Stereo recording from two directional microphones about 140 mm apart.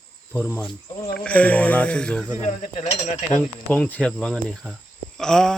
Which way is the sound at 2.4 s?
60° left (ahead or behind).